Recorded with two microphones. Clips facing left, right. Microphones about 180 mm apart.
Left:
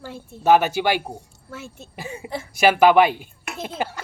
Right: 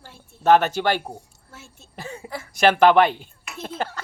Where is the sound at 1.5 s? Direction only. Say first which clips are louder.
Left 11 dB; 90° left.